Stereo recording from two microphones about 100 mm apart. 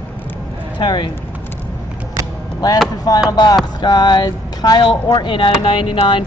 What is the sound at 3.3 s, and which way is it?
Speech, 45° left (ahead or behind).